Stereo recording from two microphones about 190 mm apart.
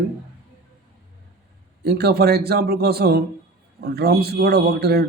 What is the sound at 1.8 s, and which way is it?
A man's voice, 55° right (ahead or behind).